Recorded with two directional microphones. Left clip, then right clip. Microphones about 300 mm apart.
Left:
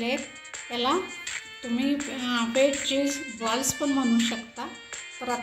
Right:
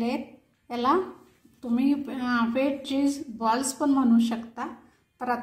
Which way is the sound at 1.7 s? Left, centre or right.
Right.